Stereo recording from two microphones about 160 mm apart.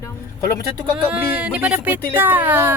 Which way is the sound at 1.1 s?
10° right (ahead or behind).